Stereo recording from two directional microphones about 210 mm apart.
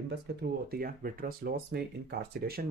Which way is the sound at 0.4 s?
45° right (ahead or behind).